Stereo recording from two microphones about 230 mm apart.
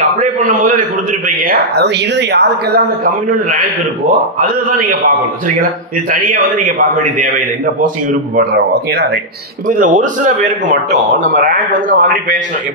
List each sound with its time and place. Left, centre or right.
0.2 s a man's voice: right
3.3 s a man's voice: right
6.1 s a man's voice: right
8.4 s a man's voice: right